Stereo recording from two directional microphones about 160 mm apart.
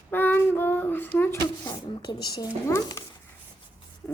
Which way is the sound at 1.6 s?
25° left (ahead or behind).